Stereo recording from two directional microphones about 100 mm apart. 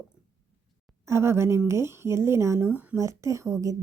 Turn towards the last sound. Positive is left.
turn(degrees=-30)  # may be behind; listen again after turning